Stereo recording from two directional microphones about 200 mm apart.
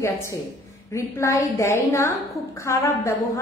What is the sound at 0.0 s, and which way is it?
A woman's voice, 15° left (ahead or behind).